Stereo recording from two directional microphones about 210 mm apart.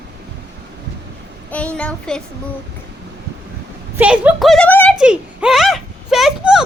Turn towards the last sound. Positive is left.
turn(degrees=-5)  # may be behind; listen again after turning